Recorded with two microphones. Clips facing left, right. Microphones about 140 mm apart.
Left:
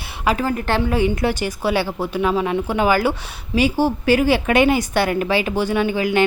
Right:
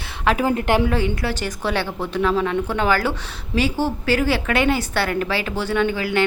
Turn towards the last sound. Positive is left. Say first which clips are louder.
# left 2 dB
turn(degrees=15)  # may be behind; listen again after turning